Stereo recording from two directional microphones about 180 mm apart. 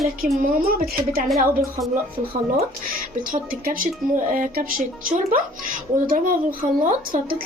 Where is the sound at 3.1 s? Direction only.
50° right (ahead or behind).